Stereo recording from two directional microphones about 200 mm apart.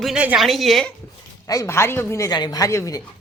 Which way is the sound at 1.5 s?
15° left (ahead or behind).